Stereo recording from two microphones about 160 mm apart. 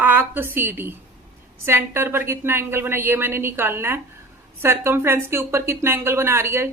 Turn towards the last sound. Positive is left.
turn(degrees=-15)  # may be behind; listen again after turning